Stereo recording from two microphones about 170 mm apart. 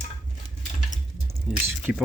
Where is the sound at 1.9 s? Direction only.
Centre (ahead or behind).